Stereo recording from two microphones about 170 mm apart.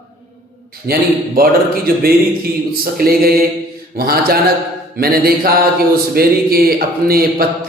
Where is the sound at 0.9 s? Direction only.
60° right (ahead or behind).